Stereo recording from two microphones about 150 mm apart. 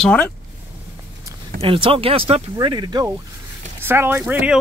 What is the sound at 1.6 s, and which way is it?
Speech, 40° right (ahead or behind).